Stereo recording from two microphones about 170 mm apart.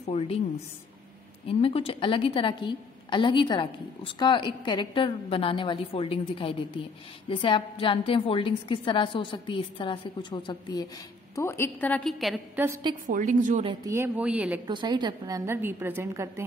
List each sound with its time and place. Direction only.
0.1 s a woman's voice: 40° left (ahead or behind)
1.5 s a woman's voice: 35° left (ahead or behind)
11.3 s a woman's voice: 15° left (ahead or behind)
12.6 s a woman's voice: 10° right (ahead or behind)
13.1 s a woman's voice: 50° right (ahead or behind)
13.8 s a woman's voice: 15° right (ahead or behind)
14.7 s a woman's voice: 25° right (ahead or behind)